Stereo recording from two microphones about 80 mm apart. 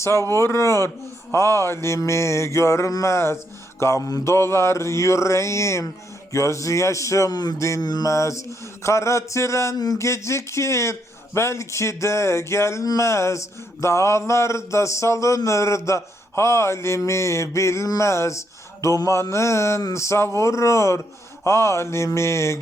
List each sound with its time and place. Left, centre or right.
0.3 s mantra: left
7.8 s mantra: left
8.1 s mantra: left
9.7 s speech: left
10.0 s mantra: left